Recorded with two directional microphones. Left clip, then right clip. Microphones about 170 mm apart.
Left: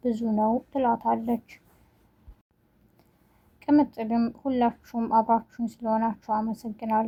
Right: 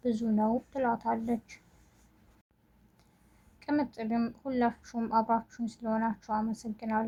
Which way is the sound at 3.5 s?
35° left (ahead or behind).